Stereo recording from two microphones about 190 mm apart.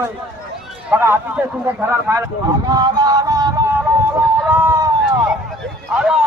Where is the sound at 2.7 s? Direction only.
20° right (ahead or behind).